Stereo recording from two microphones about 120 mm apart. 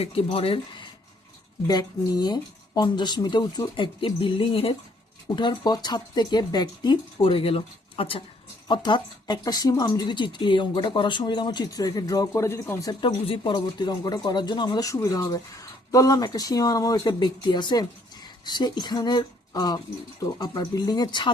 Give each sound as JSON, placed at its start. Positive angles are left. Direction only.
{"t": 0.0, "sound": "speech", "side_deg": 55}
{"t": 1.6, "sound": "speech", "side_deg": 35}
{"t": 5.4, "sound": "speech", "side_deg": 35}
{"t": 7.2, "sound": "speech", "side_deg": 50}
{"t": 8.6, "sound": "speech", "side_deg": 40}
{"t": 13.1, "sound": "speech", "side_deg": 50}